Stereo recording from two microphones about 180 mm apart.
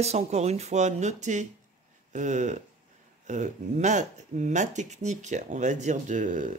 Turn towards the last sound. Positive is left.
turn(degrees=-45)  # may be behind; listen again after turning